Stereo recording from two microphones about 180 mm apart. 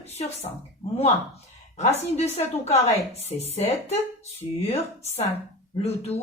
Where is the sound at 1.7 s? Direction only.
35° left (ahead or behind).